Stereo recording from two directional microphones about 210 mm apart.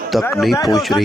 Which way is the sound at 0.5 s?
20° left (ahead or behind).